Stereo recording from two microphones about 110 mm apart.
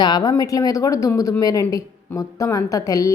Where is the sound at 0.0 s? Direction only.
40° left (ahead or behind).